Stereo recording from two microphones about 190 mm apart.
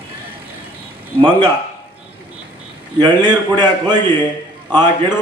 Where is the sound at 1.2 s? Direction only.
25° right (ahead or behind).